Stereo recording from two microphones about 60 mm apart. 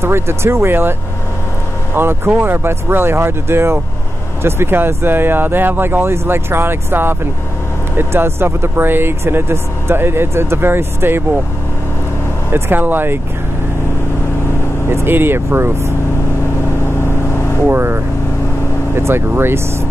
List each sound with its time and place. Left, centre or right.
0.0 s speech: right
2.0 s speech: right
12.5 s speech: right
14.9 s speech: right
17.6 s speech: right